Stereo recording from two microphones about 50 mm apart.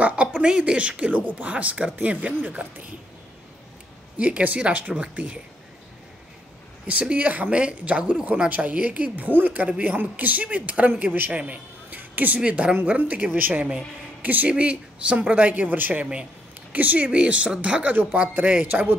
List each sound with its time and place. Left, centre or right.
0.0 s speech: right
4.2 s speech: right
6.9 s speech: right
8.0 s speech: centre
8.3 s speech: right
11.9 s a sound: right
12.4 s speech: right
14.5 s speech: right
18.7 s speech: right